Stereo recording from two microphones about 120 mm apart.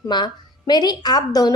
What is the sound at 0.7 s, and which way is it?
Speech, 35° left (ahead or behind).